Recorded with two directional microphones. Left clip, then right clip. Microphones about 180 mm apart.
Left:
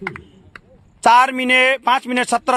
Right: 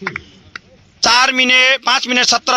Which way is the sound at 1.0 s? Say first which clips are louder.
Right 1 dB; 35° left (ahead or behind).